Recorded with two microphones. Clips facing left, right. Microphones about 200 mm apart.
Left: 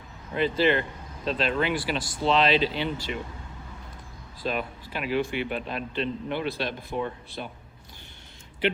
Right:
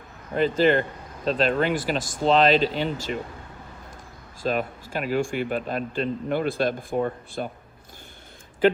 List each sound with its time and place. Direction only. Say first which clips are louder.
0.3 s speech: right 3 dB; 45° right (ahead or behind)
4.4 s speech: right 4 dB; 45° right (ahead or behind)